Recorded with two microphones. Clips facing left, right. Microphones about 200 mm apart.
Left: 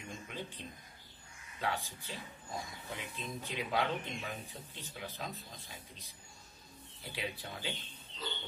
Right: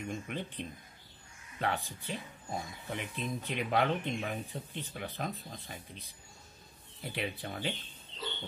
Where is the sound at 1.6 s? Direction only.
60° right (ahead or behind).